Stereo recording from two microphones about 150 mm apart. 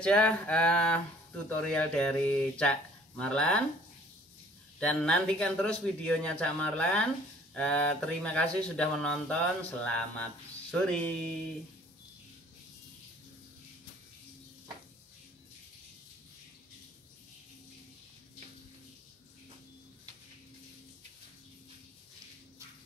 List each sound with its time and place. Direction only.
0.0 s speech: 5° left (ahead or behind)
4.7 s speech: 5° left (ahead or behind)